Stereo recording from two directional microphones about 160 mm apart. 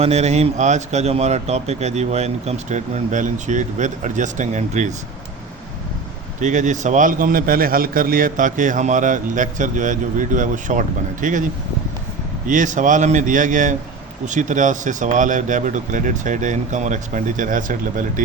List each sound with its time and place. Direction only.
0.0 s a man's voice: 45° right (ahead or behind)
6.4 s a man's voice: 50° right (ahead or behind)
12.5 s a man's voice: 55° right (ahead or behind)